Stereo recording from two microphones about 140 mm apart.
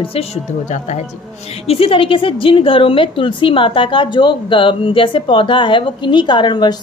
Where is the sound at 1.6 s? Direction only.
45° left (ahead or behind).